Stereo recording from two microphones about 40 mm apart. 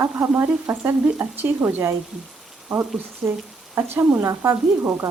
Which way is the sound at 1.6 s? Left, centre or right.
Right.